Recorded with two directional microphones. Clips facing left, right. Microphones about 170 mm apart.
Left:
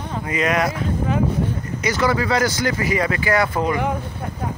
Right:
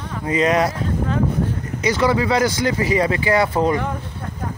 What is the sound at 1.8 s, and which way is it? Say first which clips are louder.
Speech: right 2 dB; 25° right (ahead or behind).